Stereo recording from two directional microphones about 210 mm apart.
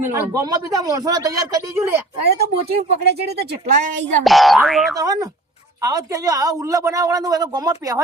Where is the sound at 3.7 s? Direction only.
35° right (ahead or behind).